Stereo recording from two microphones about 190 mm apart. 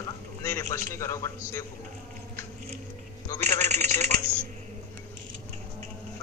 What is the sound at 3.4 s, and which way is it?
Speech, 35° right (ahead or behind).